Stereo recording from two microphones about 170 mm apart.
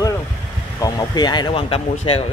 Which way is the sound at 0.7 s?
20° left (ahead or behind).